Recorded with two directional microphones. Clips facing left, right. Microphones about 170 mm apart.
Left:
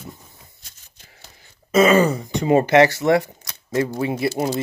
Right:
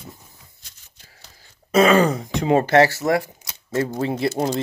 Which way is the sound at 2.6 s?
15° left (ahead or behind).